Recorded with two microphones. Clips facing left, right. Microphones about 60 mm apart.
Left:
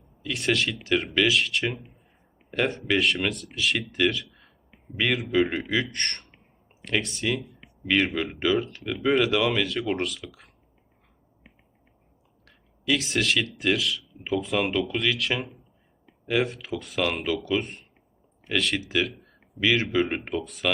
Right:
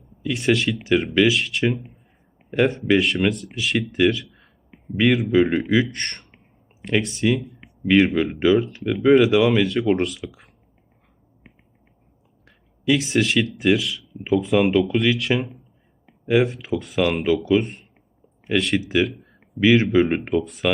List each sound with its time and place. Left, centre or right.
0.2 s speech: centre
0.8 s speech: centre
12.5 s a sound: centre
13.4 s speech: centre